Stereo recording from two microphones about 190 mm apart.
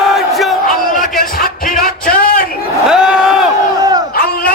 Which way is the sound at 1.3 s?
45° left (ahead or behind).